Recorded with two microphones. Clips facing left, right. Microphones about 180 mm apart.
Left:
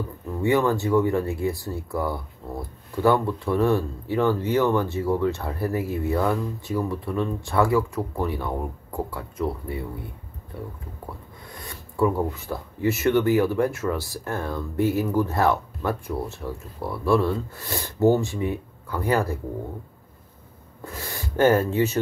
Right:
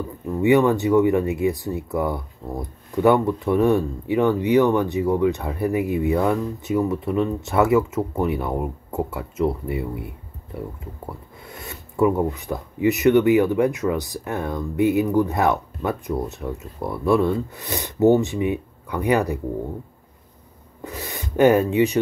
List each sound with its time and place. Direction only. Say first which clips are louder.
0.4 s speech: right 5 dB; 20° right (ahead or behind)
11.1 s a sound: right 3 dB; 25° right (ahead or behind)
12.0 s speech: right 3 dB; 20° right (ahead or behind)
20.8 s speech: right 2 dB; 20° right (ahead or behind)